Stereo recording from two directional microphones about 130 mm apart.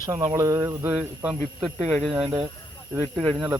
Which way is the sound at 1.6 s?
Centre (ahead or behind).